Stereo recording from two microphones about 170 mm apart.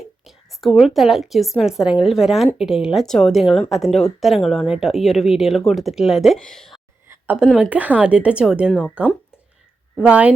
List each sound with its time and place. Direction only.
0.3 s a woman's voice: centre (ahead or behind)